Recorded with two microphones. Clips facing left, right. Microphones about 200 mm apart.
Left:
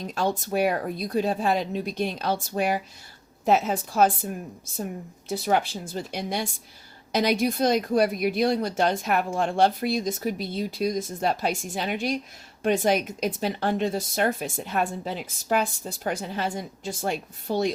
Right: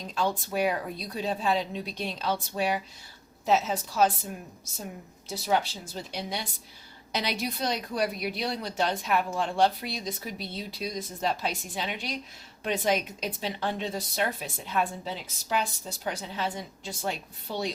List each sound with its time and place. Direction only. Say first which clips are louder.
0.1 s speech: left 3 dB; 45° left (ahead or behind)
5.3 s speech: left 3 dB; 55° left (ahead or behind)